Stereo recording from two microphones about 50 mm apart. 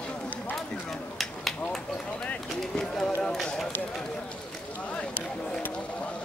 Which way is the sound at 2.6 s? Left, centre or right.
Centre.